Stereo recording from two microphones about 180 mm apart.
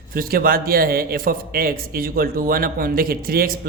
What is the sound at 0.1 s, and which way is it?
A man's voice, 55° right (ahead or behind).